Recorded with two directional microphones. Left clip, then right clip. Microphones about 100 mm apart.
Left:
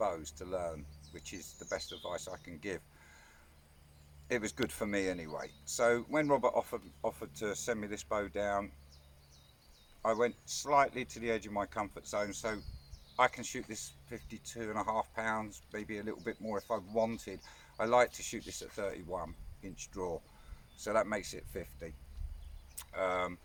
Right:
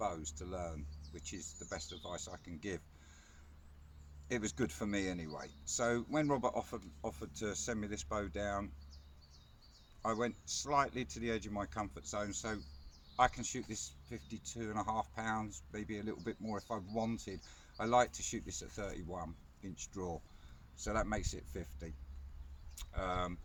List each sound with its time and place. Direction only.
0.0 s speech: 35° left (ahead or behind)
4.3 s speech: 30° left (ahead or behind)
10.0 s speech: 30° left (ahead or behind)